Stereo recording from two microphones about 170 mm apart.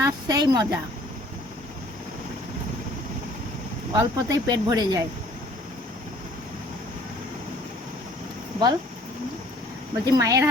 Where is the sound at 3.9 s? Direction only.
20° right (ahead or behind).